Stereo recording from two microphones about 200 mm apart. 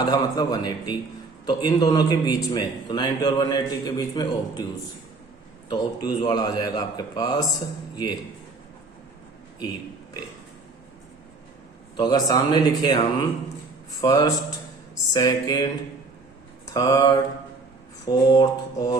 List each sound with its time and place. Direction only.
0.0 s a man's voice: 20° left (ahead or behind)
5.6 s a man's voice: 20° left (ahead or behind)
11.9 s a man's voice: 20° left (ahead or behind)